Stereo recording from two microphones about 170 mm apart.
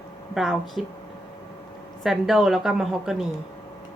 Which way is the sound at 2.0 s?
Centre (ahead or behind).